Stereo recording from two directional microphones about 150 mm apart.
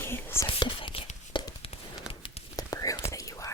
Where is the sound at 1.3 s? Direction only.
30° left (ahead or behind).